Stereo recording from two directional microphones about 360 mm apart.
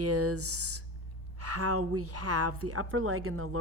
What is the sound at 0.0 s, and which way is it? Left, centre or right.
A woman's voice, right.